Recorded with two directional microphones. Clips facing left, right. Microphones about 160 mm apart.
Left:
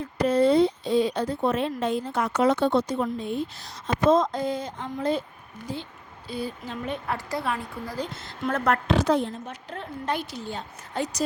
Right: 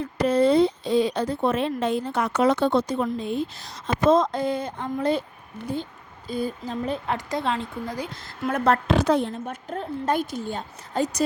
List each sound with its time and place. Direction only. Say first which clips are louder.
0.2 s speech: right 1 dB; 85° right; by 5.2 s 65° right (ahead or behind)
6.2 s speech: right 4 dB; 45° right (ahead or behind)
7.1 s a woman's voice: right 1 dB; 20° right (ahead or behind)
8.1 s a woman's voice: right 1 dB; centre (ahead or behind)
8.9 s a woman's voice: right 2 dB; 60° right (ahead or behind)
9.6 s a woman's voice: right 5 dB; 45° right (ahead or behind)